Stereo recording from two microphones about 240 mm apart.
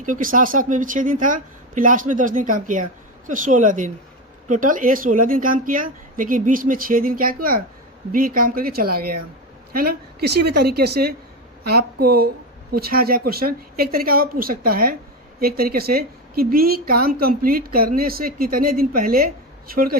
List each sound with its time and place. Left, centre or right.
0.0 s a woman's voice: right